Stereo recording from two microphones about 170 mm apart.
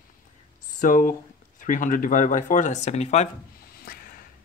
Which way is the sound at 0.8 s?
55° left (ahead or behind).